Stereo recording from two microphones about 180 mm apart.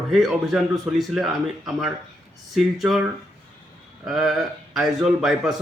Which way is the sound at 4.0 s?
5° right (ahead or behind).